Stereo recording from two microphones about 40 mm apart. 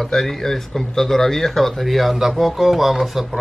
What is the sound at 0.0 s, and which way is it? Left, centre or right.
Speech, centre.